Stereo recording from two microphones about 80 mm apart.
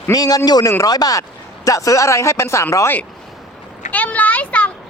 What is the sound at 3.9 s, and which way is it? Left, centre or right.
Speech, centre.